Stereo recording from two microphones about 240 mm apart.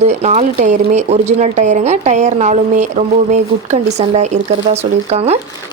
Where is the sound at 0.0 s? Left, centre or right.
Right.